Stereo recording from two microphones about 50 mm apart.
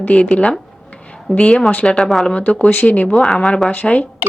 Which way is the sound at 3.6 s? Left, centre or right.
Left.